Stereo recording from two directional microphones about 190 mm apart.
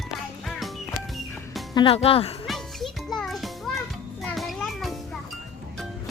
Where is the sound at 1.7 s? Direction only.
30° left (ahead or behind).